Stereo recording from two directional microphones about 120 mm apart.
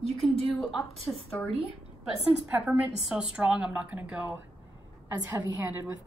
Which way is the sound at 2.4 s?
15° right (ahead or behind).